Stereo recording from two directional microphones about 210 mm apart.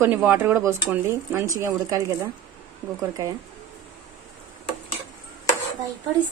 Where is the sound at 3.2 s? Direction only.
15° right (ahead or behind).